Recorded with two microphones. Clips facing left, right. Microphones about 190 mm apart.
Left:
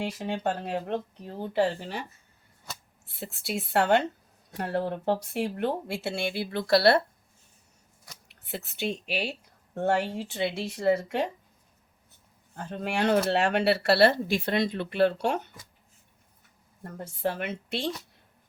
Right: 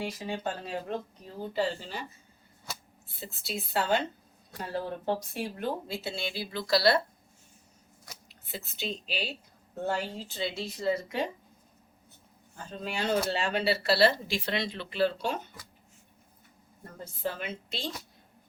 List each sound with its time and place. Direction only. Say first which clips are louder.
0.0 s speech: left 4 dB; 65° left (ahead or behind)
3.1 s speech: left 4 dB; 70° left (ahead or behind)
8.3 s speech: left 5 dB; 65° left (ahead or behind)
12.5 s speech: left 6 dB; 65° left (ahead or behind)
16.8 s speech: left 5 dB; 60° left (ahead or behind)